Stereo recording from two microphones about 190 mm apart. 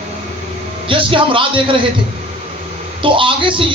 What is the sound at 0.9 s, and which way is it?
Speech, 25° right (ahead or behind).